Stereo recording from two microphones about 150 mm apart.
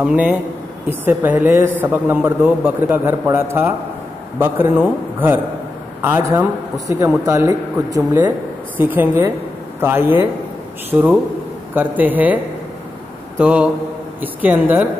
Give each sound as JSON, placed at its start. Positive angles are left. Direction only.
{"t": 0.0, "sound": "a man's voice", "side_deg": -10}
{"t": 13.4, "sound": "a man's voice", "side_deg": -10}